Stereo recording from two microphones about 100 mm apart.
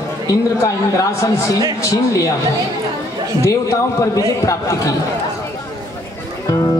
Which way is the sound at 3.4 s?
35° left (ahead or behind).